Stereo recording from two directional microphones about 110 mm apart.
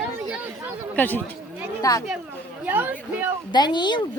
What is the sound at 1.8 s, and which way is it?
Speech, 30° left (ahead or behind).